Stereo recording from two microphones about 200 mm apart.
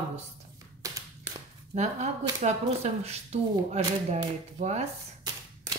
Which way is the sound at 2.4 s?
30° right (ahead or behind).